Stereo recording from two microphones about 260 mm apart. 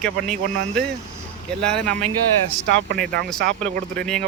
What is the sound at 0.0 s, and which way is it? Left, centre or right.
A man's voice, centre.